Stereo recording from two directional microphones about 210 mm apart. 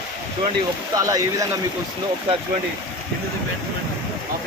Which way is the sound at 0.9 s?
15° right (ahead or behind).